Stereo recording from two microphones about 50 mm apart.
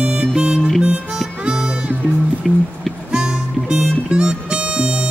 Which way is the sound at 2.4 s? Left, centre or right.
Centre.